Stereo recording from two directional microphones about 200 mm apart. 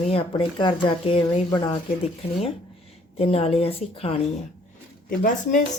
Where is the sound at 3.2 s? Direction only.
30° left (ahead or behind).